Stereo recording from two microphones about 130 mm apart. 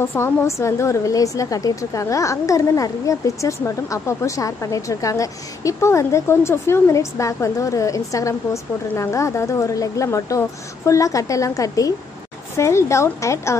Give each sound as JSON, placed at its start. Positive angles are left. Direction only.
{"t": 0.0, "sound": "a woman's voice", "side_deg": 20}